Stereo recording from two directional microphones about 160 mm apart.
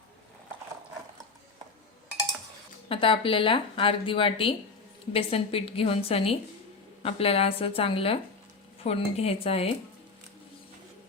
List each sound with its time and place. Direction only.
2.9 s speech: 35° left (ahead or behind)